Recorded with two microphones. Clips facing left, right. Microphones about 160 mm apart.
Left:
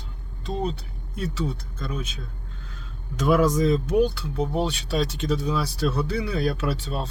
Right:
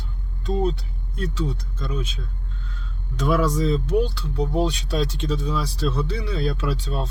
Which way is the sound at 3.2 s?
10° left (ahead or behind).